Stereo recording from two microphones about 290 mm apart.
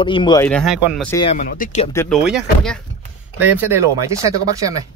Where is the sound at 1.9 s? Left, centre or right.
Centre.